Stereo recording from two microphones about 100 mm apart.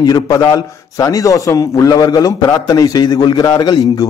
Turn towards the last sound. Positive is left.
turn(degrees=40)  # may be behind; listen again after turning